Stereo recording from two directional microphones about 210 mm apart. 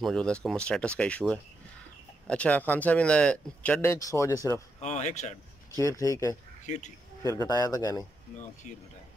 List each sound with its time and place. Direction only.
0.0 s speech: 5° left (ahead or behind)
4.7 s speech: 35° left (ahead or behind)
5.8 s speech: 15° left (ahead or behind)
6.6 s speech: 35° left (ahead or behind)
7.2 s speech: 15° left (ahead or behind)